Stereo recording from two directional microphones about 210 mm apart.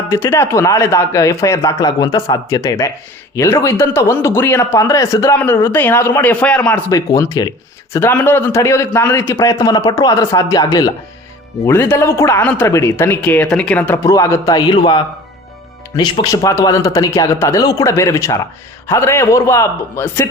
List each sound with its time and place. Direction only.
0.1 s a man's voice: 15° left (ahead or behind)